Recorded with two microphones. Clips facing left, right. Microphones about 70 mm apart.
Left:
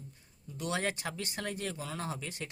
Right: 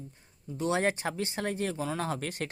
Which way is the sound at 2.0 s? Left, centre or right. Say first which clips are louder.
Right 6 dB; right.